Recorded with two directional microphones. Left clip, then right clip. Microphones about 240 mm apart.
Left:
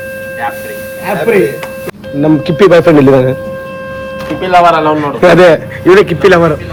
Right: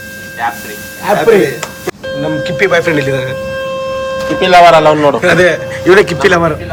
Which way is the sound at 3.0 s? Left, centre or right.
Centre.